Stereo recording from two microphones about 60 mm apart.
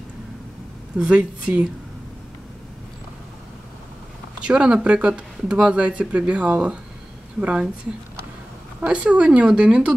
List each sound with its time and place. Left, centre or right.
0.9 s speech: centre
4.4 s speech: centre
8.8 s speech: right